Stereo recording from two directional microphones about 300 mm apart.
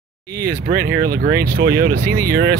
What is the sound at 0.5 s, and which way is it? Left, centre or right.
Speech, right.